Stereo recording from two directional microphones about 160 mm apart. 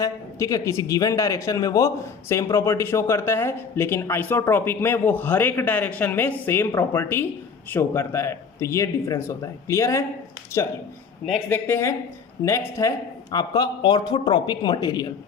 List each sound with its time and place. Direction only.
0.0 s speech: 20° left (ahead or behind)